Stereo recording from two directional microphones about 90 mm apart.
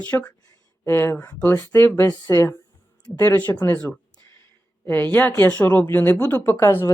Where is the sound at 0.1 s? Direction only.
20° left (ahead or behind); by 2.6 s 35° left (ahead or behind).